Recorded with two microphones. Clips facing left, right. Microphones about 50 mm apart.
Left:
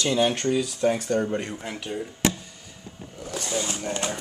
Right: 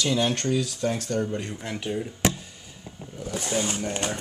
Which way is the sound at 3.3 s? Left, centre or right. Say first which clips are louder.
Right 1 dB; right.